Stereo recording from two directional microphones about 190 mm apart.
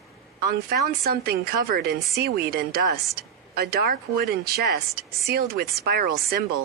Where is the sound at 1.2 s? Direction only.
50° right (ahead or behind).